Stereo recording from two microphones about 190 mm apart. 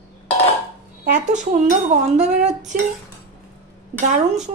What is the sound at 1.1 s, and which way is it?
Speech, 40° right (ahead or behind).